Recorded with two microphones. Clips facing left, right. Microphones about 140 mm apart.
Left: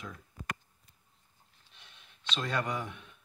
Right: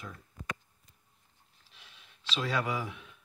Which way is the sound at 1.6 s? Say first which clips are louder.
Right 1 dB; centre (ahead or behind).